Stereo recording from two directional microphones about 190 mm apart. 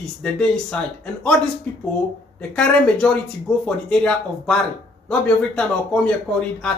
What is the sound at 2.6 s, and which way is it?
Speech, 5° left (ahead or behind).